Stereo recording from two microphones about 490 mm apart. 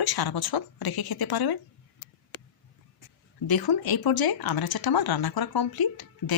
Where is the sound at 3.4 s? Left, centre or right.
Left.